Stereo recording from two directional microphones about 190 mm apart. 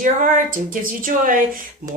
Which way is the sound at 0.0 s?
45° right (ahead or behind).